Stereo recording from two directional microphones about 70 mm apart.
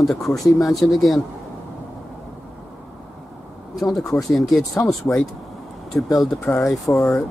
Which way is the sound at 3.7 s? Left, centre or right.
Centre.